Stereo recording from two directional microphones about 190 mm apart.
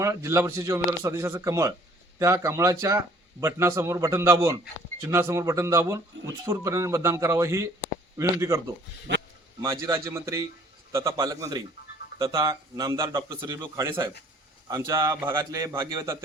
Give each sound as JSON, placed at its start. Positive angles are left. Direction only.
{"t": 0.0, "sound": "speech", "side_deg": -15}